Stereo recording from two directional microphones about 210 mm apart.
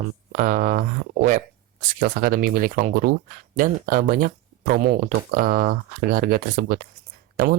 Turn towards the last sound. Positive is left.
turn(degrees=-45)  # may be behind; listen again after turning